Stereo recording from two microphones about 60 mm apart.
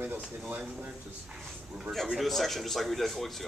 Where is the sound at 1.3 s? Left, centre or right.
Centre.